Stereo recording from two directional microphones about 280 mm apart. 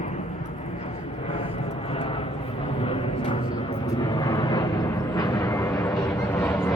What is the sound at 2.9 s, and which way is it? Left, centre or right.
Vehicle, centre.